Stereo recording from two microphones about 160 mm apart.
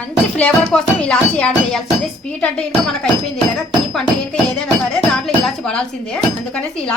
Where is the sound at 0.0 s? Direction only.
10° left (ahead or behind).